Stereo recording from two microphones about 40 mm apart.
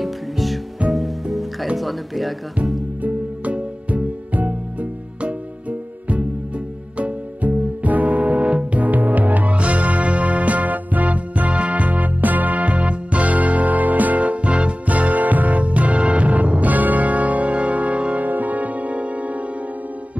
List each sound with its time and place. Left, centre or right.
0.0 s music: centre
0.8 s music: right
1.3 s music: centre
1.8 s speech: centre
3.0 s music: right
8.8 s music: right